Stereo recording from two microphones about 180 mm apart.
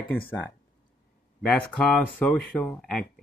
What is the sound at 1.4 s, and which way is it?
Speech, 5° left (ahead or behind).